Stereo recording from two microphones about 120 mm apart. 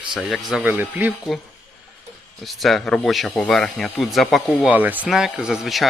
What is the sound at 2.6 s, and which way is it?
Speech, centre (ahead or behind).